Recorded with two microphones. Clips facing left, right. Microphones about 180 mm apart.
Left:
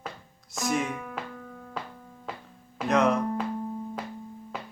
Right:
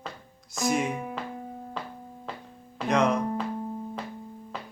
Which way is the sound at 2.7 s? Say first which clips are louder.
Left 1 dB; centre (ahead or behind).